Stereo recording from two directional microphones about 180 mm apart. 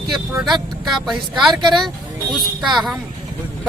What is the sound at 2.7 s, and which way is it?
Speech, centre (ahead or behind).